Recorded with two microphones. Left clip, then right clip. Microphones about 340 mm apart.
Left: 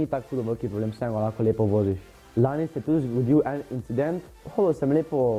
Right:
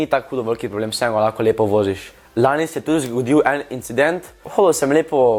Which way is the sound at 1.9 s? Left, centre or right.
Centre.